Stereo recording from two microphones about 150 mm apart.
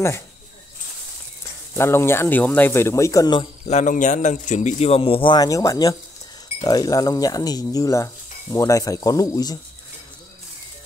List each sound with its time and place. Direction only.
1.8 s a man's voice: 15° left (ahead or behind)
3.6 s a man's voice: 55° left (ahead or behind); by 9.6 s 25° left (ahead or behind)